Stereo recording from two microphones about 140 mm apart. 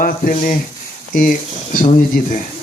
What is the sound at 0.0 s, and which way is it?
Speech, 80° left.